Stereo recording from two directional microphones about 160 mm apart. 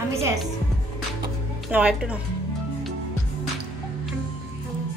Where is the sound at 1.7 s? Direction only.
5° right (ahead or behind).